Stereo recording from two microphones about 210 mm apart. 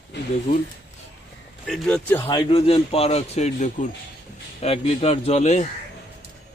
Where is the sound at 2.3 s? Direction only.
20° left (ahead or behind).